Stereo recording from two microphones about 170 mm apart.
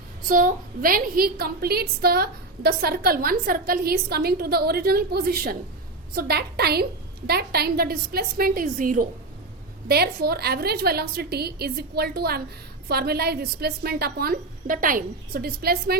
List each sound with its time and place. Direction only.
0.3 s a woman's voice: 55° right (ahead or behind)
9.9 s a woman's voice: 70° right (ahead or behind)